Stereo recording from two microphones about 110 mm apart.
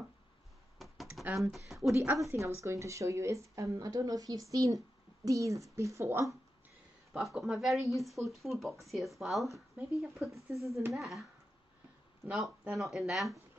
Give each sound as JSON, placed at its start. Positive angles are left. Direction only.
{"t": 0.7, "sound": "computer keyboard", "side_deg": 0}
{"t": 1.5, "sound": "speech", "side_deg": -5}
{"t": 2.2, "sound": "a woman's voice", "side_deg": -25}
{"t": 7.1, "sound": "speech", "side_deg": 0}
{"t": 12.3, "sound": "speech", "side_deg": -5}